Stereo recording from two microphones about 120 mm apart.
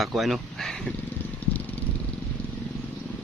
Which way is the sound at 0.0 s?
Centre (ahead or behind).